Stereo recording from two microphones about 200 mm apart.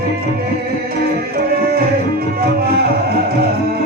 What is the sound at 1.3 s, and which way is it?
Music, 50° right (ahead or behind).